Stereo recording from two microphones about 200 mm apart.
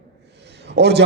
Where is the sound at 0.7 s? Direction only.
55° right (ahead or behind).